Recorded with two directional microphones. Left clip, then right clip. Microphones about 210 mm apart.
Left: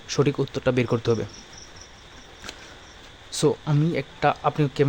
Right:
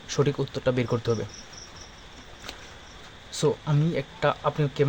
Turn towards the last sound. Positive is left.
turn(degrees=20)  # may be behind; listen again after turning